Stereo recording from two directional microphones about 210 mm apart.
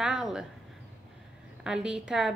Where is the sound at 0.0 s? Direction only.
5° right (ahead or behind).